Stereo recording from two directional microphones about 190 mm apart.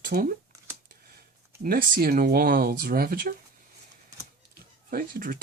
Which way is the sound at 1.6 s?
50° right (ahead or behind).